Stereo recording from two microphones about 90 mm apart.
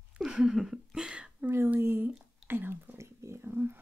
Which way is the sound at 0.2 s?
5° right (ahead or behind).